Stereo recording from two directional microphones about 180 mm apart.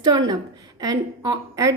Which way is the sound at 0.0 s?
20° right (ahead or behind).